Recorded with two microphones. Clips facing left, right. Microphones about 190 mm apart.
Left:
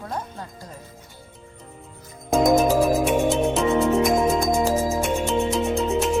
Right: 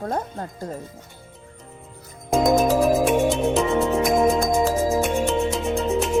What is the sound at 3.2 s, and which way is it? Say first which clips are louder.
Music: even; centre (ahead or behind).